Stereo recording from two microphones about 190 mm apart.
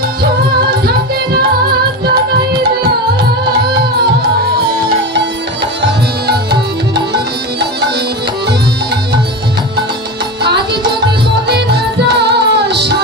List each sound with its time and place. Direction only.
0.2 s music: 55° right (ahead or behind)
10.4 s music: 60° right (ahead or behind)